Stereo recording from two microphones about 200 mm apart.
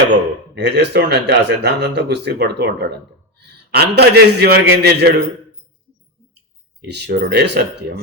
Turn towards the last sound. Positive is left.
turn(degrees=-55)  # may be behind; listen again after turning